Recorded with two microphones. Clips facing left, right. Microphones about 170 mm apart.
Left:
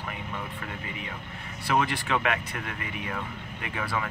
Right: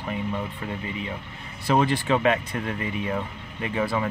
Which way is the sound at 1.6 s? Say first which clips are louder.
Right 5 dB; 30° right (ahead or behind).